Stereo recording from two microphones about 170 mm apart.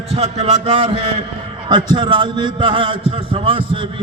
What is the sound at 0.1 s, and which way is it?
A man's voice, 40° right (ahead or behind).